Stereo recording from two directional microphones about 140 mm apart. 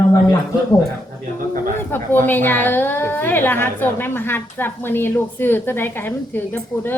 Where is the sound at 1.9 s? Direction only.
15° left (ahead or behind).